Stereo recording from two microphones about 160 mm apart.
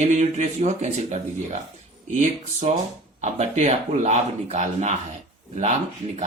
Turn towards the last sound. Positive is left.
turn(degrees=-45)  # may be behind; listen again after turning